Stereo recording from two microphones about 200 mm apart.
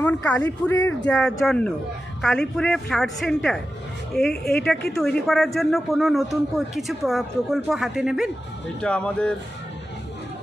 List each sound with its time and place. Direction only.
0.0 s a man's voice: 5° left (ahead or behind)
4.5 s speech: 50° left (ahead or behind)
4.9 s a man's voice: centre (ahead or behind)